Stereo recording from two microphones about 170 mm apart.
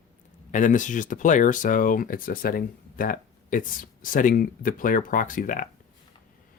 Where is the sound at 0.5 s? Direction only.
50° left (ahead or behind).